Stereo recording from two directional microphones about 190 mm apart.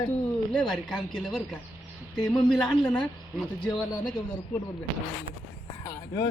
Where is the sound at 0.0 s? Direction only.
5° left (ahead or behind).